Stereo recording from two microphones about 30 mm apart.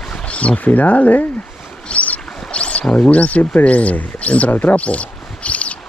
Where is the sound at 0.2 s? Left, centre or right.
Left.